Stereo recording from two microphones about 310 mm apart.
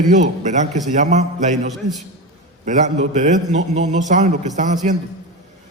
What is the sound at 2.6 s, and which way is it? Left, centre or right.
A man's voice, right.